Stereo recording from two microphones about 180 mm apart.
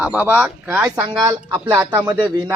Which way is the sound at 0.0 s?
10° right (ahead or behind).